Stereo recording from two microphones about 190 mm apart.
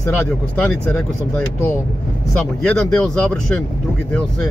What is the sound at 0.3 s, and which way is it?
Speech, 5° left (ahead or behind).